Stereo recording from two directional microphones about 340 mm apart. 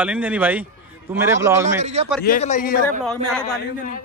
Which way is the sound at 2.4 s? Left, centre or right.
Left.